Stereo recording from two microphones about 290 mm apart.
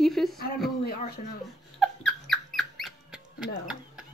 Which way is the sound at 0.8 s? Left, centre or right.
Left.